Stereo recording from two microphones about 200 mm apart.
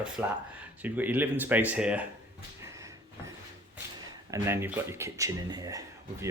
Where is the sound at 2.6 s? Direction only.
15° right (ahead or behind).